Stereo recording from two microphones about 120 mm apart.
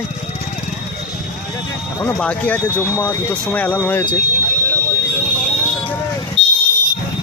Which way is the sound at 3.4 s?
10° left (ahead or behind).